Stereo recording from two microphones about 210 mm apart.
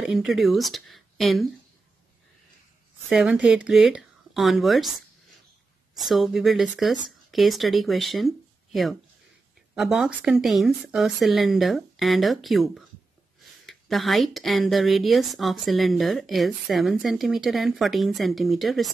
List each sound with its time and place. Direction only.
0.0 s speech: centre (ahead or behind)
3.1 s speech: 5° right (ahead or behind)
9.8 s speech: centre (ahead or behind)